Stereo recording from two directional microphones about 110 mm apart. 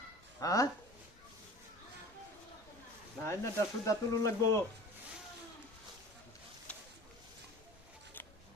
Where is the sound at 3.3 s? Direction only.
25° left (ahead or behind).